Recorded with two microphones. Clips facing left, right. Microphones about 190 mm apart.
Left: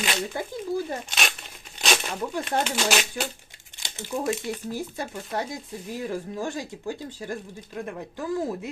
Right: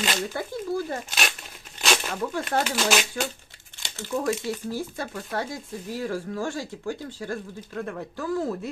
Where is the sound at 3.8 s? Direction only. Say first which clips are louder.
Right 1 dB; 15° left (ahead or behind).